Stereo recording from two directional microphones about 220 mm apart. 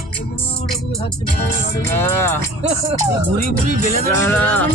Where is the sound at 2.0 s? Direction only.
10° left (ahead or behind).